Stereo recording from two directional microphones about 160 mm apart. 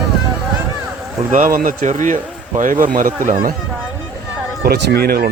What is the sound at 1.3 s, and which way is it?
Speech, 55° right (ahead or behind).